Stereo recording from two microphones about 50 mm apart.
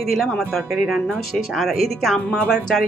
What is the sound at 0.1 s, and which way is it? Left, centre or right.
Speech, centre.